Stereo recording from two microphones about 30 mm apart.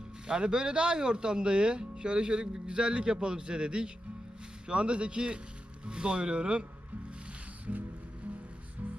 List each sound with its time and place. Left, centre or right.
0.3 s speech: right
7.7 s music: right